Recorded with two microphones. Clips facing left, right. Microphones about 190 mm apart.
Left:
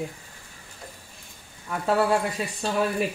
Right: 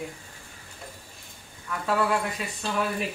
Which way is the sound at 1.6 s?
35° left (ahead or behind).